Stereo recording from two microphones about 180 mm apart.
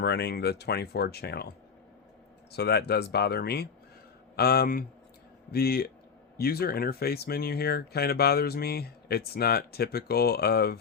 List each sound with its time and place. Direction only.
0.0 s speech: 70° left (ahead or behind)
2.5 s speech: 65° left (ahead or behind)